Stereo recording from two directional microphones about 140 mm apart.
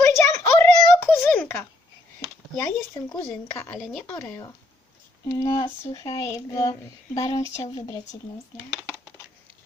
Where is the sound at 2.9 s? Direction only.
20° left (ahead or behind).